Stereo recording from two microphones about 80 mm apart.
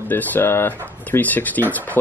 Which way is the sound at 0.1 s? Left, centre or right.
Left.